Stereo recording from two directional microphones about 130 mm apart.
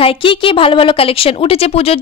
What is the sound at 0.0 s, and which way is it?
A woman's voice, 40° left (ahead or behind).